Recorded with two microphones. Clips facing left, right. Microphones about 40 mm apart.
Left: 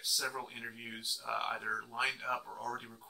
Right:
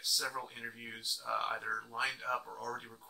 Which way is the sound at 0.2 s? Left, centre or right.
Centre.